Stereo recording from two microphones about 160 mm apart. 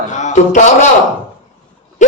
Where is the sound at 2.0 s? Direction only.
50° left (ahead or behind).